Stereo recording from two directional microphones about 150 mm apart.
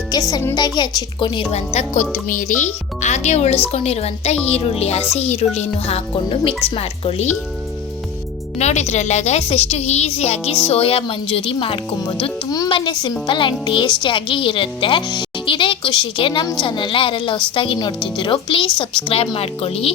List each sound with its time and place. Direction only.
0.1 s a woman's voice: 25° left (ahead or behind)
1.5 s a woman's voice: 50° left (ahead or behind)
2.2 s a woman's voice: 60° left (ahead or behind); by 7.3 s 40° left (ahead or behind)
8.5 s a woman's voice: 50° left (ahead or behind)